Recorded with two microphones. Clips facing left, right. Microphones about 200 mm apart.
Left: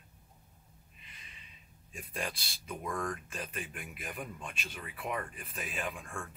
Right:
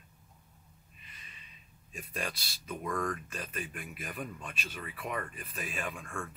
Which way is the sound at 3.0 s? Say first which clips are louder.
Right 2 dB; 15° left (ahead or behind).